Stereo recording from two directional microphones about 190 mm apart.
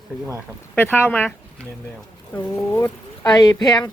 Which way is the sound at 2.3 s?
10° left (ahead or behind).